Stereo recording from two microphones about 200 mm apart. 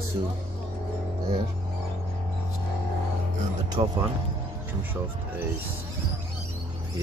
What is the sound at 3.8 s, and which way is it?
Speech, 30° right (ahead or behind).